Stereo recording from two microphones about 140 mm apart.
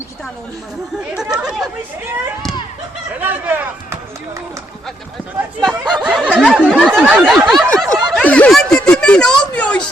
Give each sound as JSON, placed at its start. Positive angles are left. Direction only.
{"t": 1.1, "sound": "snicker", "side_deg": -5}
{"t": 3.2, "sound": "speech", "side_deg": -15}
{"t": 5.5, "sound": "snicker", "side_deg": 0}
{"t": 7.9, "sound": "snicker", "side_deg": -30}
{"t": 8.1, "sound": "a sound", "side_deg": 10}